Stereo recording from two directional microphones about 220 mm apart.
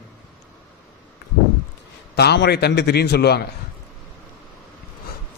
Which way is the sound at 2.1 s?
50° left (ahead or behind).